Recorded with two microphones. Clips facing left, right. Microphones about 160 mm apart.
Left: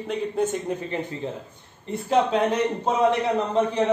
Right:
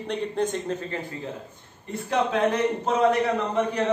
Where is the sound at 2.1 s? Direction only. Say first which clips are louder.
Left 2 dB; 25° left (ahead or behind).